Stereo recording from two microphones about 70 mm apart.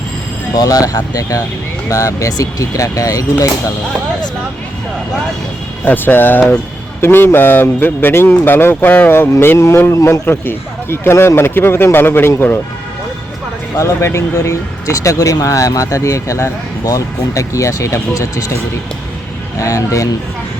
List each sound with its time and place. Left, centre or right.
0.5 s speech: left
5.8 s a man's voice: left
10.2 s a man's voice: left
13.7 s speech: left
19.5 s speech: left